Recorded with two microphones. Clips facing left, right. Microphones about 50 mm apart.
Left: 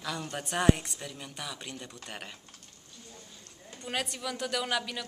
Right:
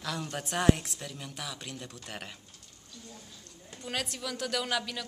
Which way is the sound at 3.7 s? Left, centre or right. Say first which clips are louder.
Left 1 dB; centre.